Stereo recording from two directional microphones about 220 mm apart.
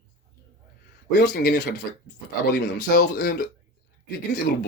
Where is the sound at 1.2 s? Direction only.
50° left (ahead or behind).